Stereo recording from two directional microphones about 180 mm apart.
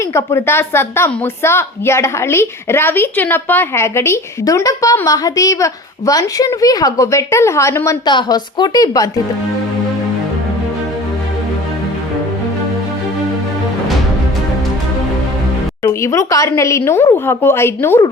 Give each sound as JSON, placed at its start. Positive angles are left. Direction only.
{"t": 0.1, "sound": "a woman's voice", "side_deg": 15}
{"t": 15.8, "sound": "a woman's voice", "side_deg": 15}